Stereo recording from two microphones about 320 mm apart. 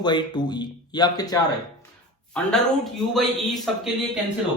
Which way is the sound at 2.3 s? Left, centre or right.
Centre.